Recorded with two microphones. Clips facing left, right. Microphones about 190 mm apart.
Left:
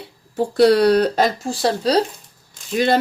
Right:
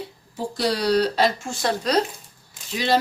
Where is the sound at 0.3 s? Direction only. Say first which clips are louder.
Left 11 dB; 60° left (ahead or behind).